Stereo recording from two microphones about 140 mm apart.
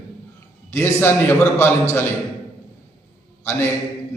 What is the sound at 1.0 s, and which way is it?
Speech, 15° left (ahead or behind).